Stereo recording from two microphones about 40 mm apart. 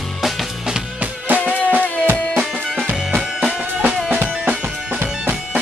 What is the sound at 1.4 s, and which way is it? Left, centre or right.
Music, left.